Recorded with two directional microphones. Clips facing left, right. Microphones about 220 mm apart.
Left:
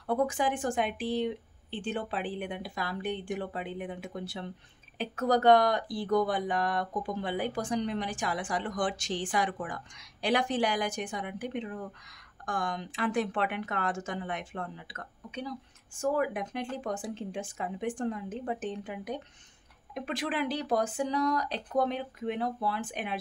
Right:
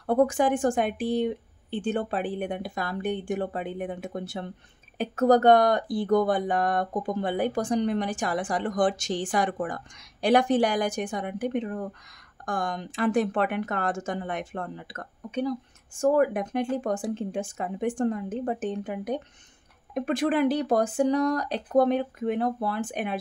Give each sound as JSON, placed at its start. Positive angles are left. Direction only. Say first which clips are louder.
{"t": 0.0, "sound": "speech", "louder": "right 6 dB", "side_deg": -50}